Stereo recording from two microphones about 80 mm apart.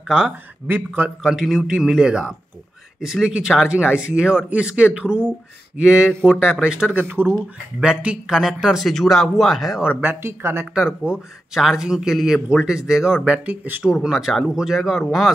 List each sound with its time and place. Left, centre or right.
0.1 s speech: centre
1.2 s speech: centre
7.1 s speech: right
7.8 s speech: centre
9.8 s speech: right
10.7 s speech: centre
13.8 s speech: centre